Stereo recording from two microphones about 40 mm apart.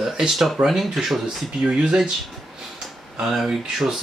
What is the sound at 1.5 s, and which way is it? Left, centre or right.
Speech, centre.